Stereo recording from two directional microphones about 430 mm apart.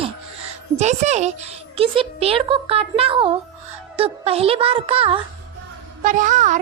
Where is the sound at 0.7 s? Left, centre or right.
Centre.